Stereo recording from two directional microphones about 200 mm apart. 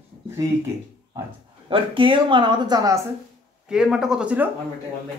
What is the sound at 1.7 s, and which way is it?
Speech, 25° right (ahead or behind).